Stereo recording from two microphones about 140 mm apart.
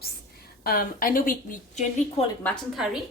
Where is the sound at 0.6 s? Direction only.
90° left.